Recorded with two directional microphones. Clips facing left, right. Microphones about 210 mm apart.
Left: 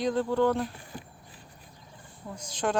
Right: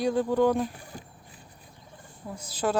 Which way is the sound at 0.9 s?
45° right (ahead or behind).